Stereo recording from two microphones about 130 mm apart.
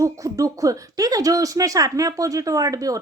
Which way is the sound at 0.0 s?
25° right (ahead or behind).